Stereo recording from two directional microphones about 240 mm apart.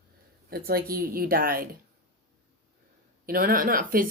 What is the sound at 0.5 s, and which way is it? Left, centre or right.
Speech, right.